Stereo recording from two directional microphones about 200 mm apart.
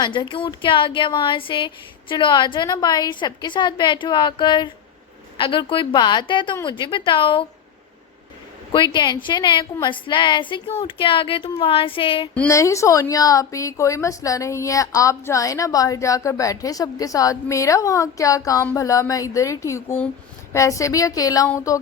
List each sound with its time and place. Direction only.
0.0 s speech: 25° left (ahead or behind)
8.7 s speech: 25° left (ahead or behind)
12.3 s a woman's voice: 10° left (ahead or behind)